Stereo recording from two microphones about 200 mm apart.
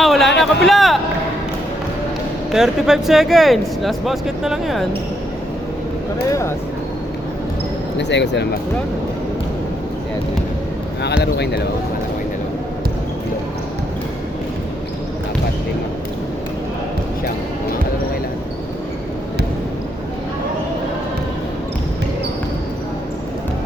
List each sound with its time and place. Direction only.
0.0 s a sound: centre (ahead or behind)
2.5 s speech: centre (ahead or behind)
7.9 s speech: 60° left (ahead or behind)
11.2 s speech: 55° left (ahead or behind)